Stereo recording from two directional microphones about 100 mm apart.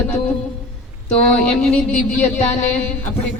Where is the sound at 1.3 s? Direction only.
10° left (ahead or behind).